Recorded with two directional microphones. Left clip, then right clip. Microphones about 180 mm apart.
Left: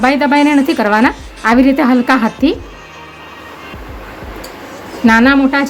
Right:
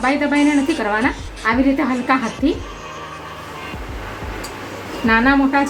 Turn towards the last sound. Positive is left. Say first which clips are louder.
# left 5 dB
turn(degrees=50)  # may be behind; listen again after turning